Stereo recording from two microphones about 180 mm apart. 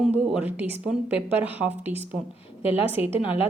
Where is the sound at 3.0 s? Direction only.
10° right (ahead or behind).